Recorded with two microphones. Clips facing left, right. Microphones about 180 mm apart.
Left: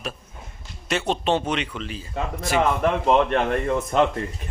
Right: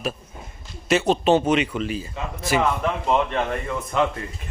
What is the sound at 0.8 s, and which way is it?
A man's voice, 5° right (ahead or behind).